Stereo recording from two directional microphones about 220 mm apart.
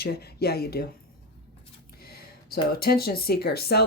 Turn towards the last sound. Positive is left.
turn(degrees=45)  # may be behind; listen again after turning